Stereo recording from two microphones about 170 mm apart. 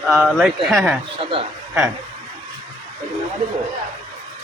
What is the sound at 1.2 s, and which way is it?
Speech, 35° right (ahead or behind).